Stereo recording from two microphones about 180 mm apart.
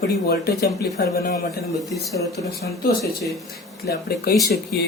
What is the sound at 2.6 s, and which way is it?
Speech, 55° left (ahead or behind).